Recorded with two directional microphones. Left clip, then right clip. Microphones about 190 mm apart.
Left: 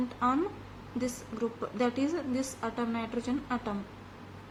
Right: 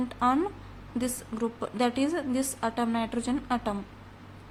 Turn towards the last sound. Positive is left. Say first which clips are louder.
# right 4 dB
turn(degrees=-45)  # may be behind; listen again after turning